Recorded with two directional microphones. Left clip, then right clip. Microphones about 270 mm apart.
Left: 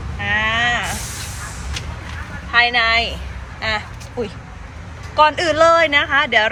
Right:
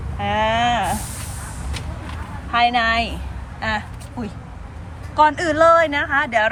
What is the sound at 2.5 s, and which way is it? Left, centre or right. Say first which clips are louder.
Speech: left 2 dB; centre.